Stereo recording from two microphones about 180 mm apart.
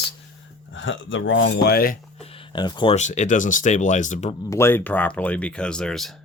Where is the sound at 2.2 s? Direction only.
30° left (ahead or behind).